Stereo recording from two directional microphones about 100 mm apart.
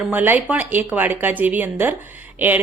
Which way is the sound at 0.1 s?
15° right (ahead or behind).